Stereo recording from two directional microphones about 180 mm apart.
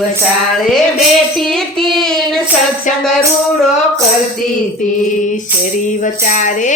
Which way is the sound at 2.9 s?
45° left (ahead or behind).